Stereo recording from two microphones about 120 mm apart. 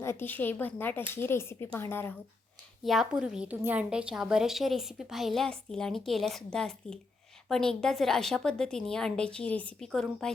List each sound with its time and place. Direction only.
0.0 s speech: 20° left (ahead or behind)
2.8 s a woman's voice: centre (ahead or behind)